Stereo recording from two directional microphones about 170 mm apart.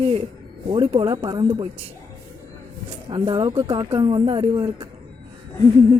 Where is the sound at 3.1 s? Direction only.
30° right (ahead or behind).